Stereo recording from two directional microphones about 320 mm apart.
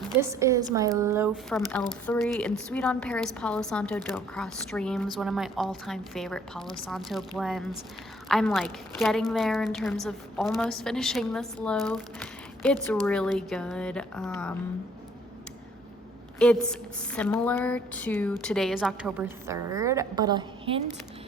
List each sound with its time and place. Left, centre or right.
0.2 s a woman's voice: centre
16.4 s a woman's voice: centre